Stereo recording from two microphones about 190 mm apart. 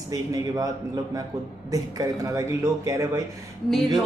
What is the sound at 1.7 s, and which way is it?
Speech, 15° right (ahead or behind).